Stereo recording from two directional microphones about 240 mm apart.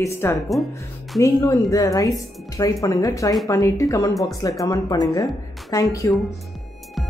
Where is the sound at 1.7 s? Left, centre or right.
Centre.